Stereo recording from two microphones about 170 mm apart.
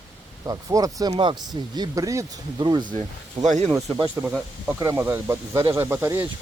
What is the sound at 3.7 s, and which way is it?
Speech, 20° right (ahead or behind).